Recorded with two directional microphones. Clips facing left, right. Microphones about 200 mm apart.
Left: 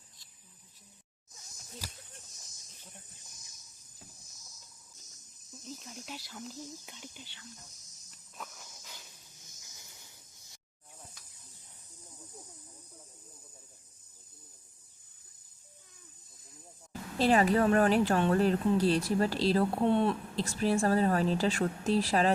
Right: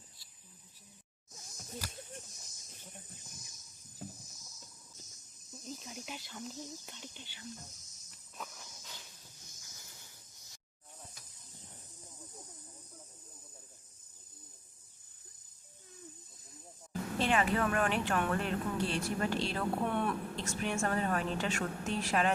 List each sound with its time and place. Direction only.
5.6 s speech: centre (ahead or behind)
8.4 s a sound: centre (ahead or behind)
17.2 s speech: 35° left (ahead or behind)
19.8 s speech: 25° left (ahead or behind)